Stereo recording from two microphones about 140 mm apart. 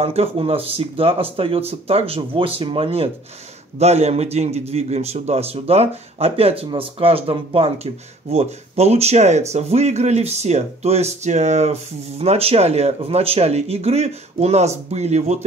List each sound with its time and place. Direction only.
0.0 s a man's voice: 45° right (ahead or behind)